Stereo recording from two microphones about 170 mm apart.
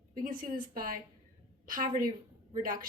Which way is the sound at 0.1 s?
55° right (ahead or behind).